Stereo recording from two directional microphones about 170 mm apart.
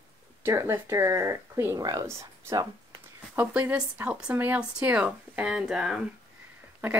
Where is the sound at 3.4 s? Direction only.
10° right (ahead or behind).